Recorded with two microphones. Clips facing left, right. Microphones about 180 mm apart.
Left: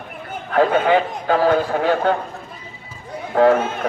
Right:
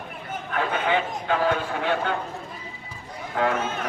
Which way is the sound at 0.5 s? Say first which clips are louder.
Left 9 dB; 40° left (ahead or behind).